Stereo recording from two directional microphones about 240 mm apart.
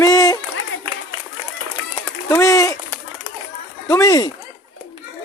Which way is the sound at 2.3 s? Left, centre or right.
Centre.